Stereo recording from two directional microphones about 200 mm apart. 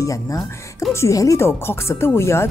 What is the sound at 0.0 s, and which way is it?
Speech, 15° left (ahead or behind).